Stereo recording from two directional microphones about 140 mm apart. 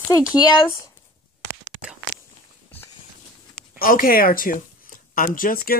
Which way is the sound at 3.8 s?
90° left.